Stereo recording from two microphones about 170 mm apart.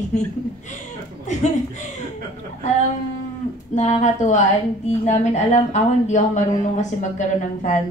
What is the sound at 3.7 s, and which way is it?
A woman's voice, 45° left (ahead or behind).